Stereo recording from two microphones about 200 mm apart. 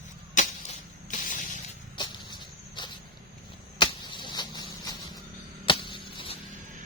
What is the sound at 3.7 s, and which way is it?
Arrow, 25° left (ahead or behind).